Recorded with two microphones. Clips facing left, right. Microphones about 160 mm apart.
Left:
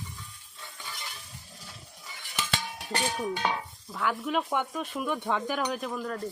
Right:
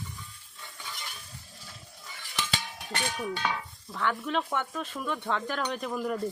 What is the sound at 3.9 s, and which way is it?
Speech, 5° left (ahead or behind).